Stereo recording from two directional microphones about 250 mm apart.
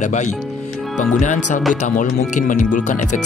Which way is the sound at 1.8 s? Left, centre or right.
Left.